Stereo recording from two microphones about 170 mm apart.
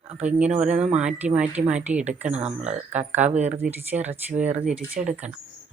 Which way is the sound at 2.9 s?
10° right (ahead or behind).